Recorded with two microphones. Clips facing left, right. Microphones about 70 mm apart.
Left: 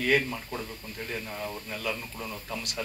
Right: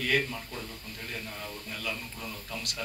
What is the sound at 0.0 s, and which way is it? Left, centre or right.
A man's voice, left.